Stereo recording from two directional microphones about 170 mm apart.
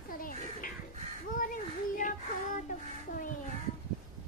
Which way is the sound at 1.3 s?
50° left (ahead or behind).